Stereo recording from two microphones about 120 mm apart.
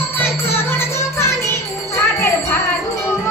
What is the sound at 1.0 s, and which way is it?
Music, 20° left (ahead or behind).